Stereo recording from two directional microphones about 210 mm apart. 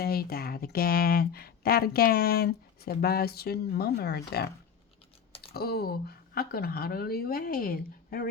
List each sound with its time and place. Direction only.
0.0 s speech: 45° left (ahead or behind)